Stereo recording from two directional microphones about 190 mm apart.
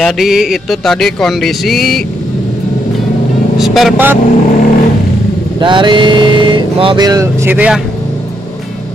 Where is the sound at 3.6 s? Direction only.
Centre (ahead or behind).